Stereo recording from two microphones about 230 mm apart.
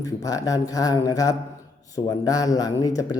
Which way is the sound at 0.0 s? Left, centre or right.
Centre.